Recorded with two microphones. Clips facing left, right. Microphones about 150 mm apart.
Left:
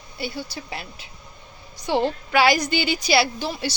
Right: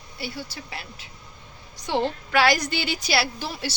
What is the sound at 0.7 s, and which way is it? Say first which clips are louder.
Speech: left 3 dB; 20° left (ahead or behind).